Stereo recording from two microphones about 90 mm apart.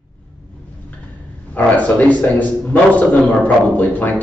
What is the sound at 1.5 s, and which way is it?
A man's voice, 20° left (ahead or behind).